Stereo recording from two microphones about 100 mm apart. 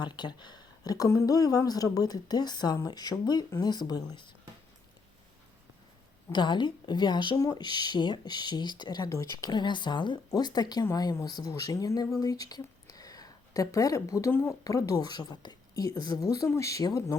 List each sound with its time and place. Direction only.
0.0 s a woman's voice: 50° left (ahead or behind)
6.3 s speech: 50° left (ahead or behind)
7.3 s a woman's voice: 40° left (ahead or behind); by 14.5 s 20° left (ahead or behind)
14.6 s a woman's voice: 35° left (ahead or behind)